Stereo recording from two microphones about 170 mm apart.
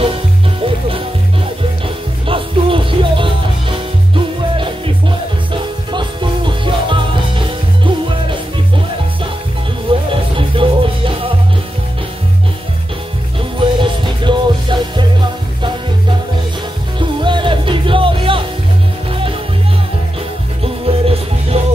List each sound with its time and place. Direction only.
0.6 s music: 30° right (ahead or behind)
2.2 s music: 30° right (ahead or behind)
9.8 s music: 30° right (ahead or behind)
13.6 s music: 30° right (ahead or behind)
17.0 s music: 30° right (ahead or behind)
20.6 s music: 35° right (ahead or behind)